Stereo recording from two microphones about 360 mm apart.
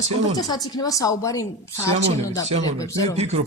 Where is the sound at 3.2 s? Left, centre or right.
Centre.